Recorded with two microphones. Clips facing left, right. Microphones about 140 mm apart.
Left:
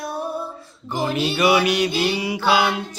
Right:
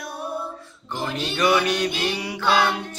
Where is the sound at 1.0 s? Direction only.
5° left (ahead or behind).